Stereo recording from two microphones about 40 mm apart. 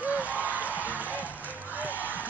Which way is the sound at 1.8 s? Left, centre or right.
Right.